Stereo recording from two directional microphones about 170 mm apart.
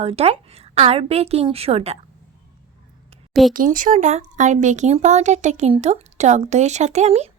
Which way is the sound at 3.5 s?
50° right (ahead or behind).